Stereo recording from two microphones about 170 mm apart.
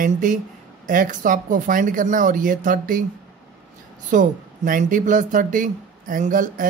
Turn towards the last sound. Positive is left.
turn(degrees=-50)  # may be behind; listen again after turning